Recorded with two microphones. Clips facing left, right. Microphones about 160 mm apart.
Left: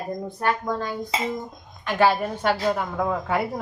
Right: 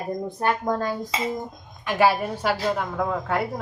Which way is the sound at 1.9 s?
10° right (ahead or behind).